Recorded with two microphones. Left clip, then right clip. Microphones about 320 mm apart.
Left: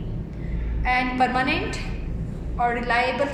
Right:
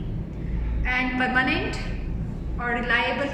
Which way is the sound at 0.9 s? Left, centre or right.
Centre.